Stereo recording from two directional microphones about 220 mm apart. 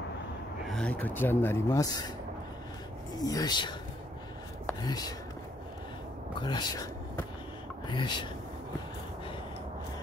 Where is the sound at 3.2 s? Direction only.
15° left (ahead or behind).